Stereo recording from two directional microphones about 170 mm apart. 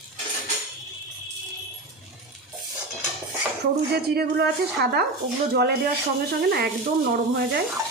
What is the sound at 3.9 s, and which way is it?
Speech, 70° right (ahead or behind).